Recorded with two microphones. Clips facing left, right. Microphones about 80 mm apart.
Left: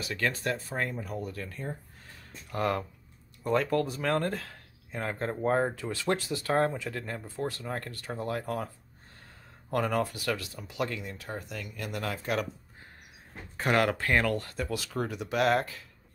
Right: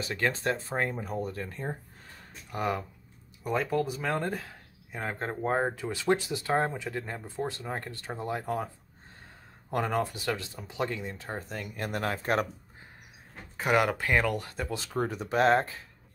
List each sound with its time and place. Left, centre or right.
0.0 s speech: right
2.5 s speech: centre
9.7 s speech: right
13.6 s speech: centre; by 15.8 s right